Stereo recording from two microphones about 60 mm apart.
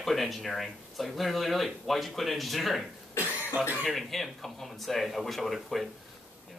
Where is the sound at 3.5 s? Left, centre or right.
Right.